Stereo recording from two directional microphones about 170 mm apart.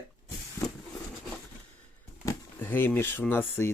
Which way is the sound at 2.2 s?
10° left (ahead or behind).